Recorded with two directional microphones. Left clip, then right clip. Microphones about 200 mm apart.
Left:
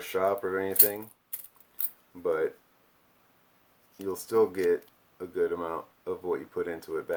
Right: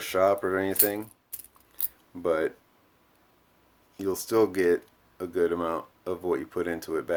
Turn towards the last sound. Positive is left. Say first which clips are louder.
# right 3 dB
turn(degrees=-45)  # may be behind; listen again after turning